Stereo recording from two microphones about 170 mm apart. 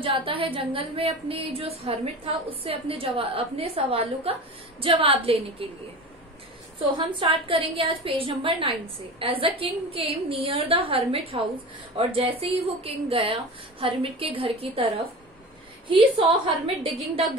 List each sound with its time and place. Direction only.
0.0 s a woman's voice: 30° right (ahead or behind)
6.9 s a woman's voice: 30° right (ahead or behind)
15.9 s a woman's voice: 30° right (ahead or behind)